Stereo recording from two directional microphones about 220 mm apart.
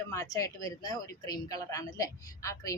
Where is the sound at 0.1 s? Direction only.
15° left (ahead or behind).